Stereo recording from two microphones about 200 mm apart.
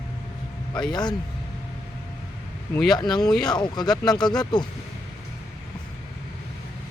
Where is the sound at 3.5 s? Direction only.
20° left (ahead or behind).